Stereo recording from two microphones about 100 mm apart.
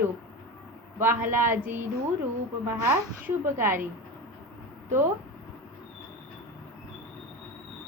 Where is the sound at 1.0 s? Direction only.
20° right (ahead or behind).